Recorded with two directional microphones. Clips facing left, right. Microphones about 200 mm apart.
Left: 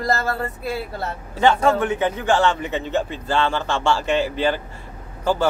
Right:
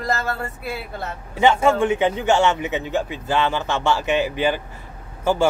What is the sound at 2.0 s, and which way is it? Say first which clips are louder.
A man's voice: even; 25° right (ahead or behind).